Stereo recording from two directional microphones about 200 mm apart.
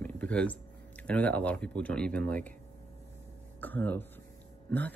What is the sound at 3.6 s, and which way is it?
Speech, 10° left (ahead or behind).